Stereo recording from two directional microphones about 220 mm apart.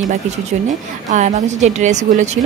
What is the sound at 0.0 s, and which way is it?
Speech, 35° right (ahead or behind).